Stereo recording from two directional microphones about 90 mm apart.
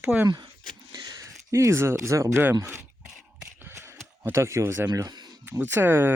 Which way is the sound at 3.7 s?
30° right (ahead or behind).